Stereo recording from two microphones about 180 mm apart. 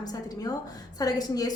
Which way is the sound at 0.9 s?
20° left (ahead or behind).